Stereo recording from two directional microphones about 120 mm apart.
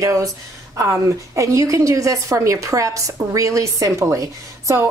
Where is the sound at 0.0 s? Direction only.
25° right (ahead or behind).